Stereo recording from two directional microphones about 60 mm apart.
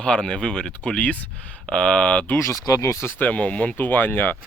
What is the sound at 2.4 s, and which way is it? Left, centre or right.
Speech, left.